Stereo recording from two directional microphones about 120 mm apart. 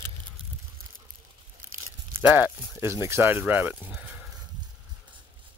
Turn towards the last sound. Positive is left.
turn(degrees=-15)  # may be behind; listen again after turning